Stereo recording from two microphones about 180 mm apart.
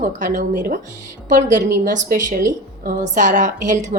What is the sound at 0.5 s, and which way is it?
Speech, 55° right (ahead or behind).